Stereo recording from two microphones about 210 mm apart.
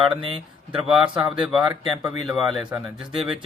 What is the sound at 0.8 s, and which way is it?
Speech, centre (ahead or behind).